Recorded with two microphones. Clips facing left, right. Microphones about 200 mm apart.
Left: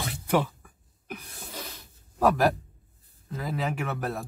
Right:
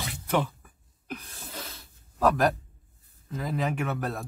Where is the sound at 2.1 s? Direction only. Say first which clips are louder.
Left 1 dB; 10° left (ahead or behind).